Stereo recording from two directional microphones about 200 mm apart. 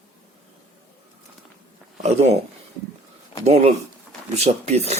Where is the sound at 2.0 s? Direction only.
35° right (ahead or behind).